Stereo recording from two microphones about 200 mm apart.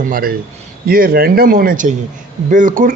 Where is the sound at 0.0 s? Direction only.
45° right (ahead or behind).